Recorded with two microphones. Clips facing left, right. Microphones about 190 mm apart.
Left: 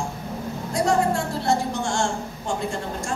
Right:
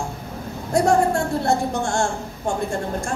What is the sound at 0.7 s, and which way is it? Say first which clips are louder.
A woman's voice: right 4 dB; 55° right (ahead or behind).